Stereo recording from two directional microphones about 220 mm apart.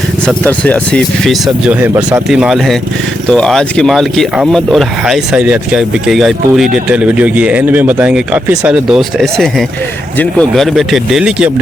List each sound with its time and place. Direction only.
0.3 s speech: 5° left (ahead or behind)
2.0 s speech: 20° right (ahead or behind)
2.3 s speech: centre (ahead or behind)